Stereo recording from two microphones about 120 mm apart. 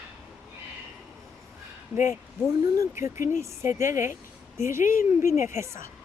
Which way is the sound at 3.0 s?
25° right (ahead or behind).